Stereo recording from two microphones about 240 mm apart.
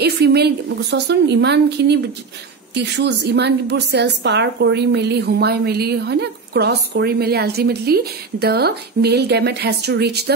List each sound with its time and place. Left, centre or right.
0.0 s a woman's voice: right